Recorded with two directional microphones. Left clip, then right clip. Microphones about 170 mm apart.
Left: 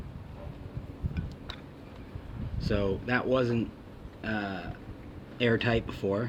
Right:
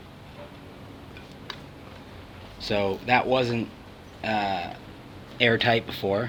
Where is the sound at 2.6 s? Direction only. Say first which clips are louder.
Right 5 dB; 20° left (ahead or behind).